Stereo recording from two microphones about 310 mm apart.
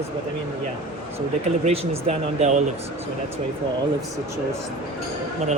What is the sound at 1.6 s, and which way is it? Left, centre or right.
Speech, centre.